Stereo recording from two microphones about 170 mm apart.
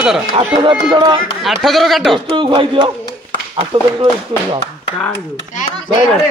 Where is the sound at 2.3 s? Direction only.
30° right (ahead or behind).